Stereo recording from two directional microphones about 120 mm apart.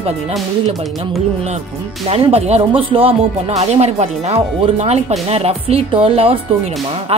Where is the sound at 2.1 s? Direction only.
60° right (ahead or behind).